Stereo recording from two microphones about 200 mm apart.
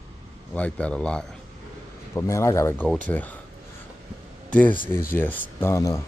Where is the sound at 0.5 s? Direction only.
5° left (ahead or behind).